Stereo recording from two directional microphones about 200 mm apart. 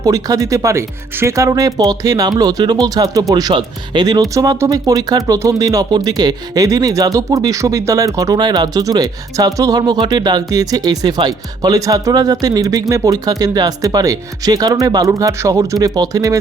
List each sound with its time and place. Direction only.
0.0 s speech: 15° right (ahead or behind)